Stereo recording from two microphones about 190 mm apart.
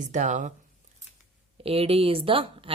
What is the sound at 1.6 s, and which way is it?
A woman's voice, 30° right (ahead or behind).